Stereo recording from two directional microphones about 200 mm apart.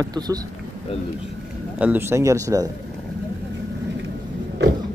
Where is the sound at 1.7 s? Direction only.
10° right (ahead or behind).